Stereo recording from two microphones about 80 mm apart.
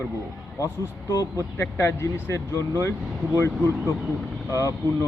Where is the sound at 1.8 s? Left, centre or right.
Left.